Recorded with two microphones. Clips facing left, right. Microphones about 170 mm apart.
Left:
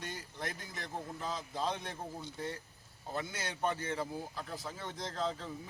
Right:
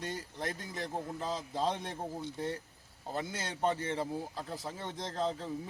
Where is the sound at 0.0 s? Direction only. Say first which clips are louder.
Right 4 dB; 30° right (ahead or behind).